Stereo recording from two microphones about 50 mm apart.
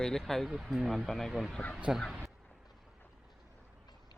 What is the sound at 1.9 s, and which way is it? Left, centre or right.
Speech, centre.